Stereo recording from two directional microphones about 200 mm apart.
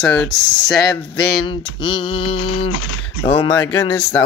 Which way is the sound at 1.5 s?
25° left (ahead or behind).